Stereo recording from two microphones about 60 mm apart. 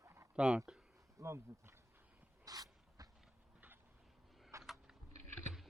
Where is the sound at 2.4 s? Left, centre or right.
Right.